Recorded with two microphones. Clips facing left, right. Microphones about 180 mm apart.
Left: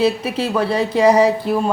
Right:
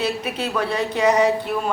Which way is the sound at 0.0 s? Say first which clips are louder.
Left 6 dB; 30° left (ahead or behind).